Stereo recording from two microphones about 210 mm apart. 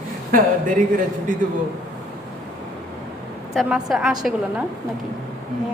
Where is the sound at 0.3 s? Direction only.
40° right (ahead or behind).